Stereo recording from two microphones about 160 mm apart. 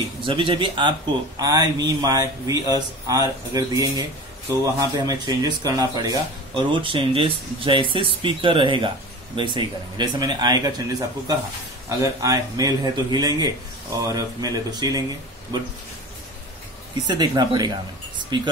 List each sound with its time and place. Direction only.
0.2 s speech: 35° right (ahead or behind)
17.1 s speech: 25° right (ahead or behind)